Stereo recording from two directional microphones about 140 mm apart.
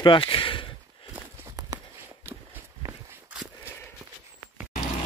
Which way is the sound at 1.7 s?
25° right (ahead or behind).